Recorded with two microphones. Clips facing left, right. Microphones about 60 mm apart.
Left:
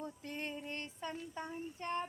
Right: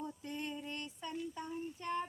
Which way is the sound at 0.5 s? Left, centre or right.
Left.